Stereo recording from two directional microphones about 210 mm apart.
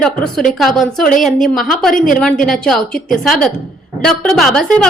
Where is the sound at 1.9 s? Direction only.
40° left (ahead or behind).